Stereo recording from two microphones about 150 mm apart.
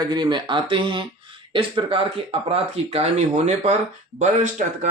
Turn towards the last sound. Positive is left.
turn(degrees=-55)  # may be behind; listen again after turning